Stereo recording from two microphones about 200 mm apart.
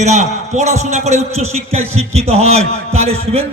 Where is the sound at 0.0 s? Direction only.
35° right (ahead or behind).